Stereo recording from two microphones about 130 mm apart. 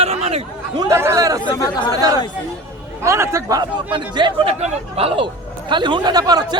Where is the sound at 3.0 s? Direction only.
20° right (ahead or behind).